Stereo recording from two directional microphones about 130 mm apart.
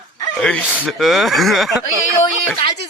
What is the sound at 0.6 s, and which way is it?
A child's voice, 10° right (ahead or behind).